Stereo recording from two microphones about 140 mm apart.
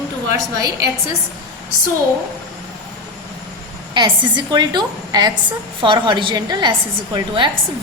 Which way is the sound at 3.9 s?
35° right (ahead or behind).